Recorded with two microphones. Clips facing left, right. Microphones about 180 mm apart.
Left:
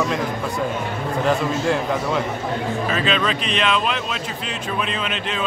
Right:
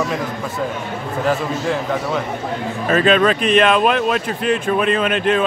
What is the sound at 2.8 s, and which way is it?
Speech, 50° right (ahead or behind).